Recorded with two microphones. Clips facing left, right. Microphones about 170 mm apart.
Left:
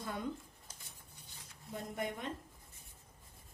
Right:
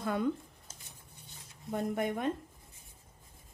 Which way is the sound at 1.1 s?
25° right (ahead or behind).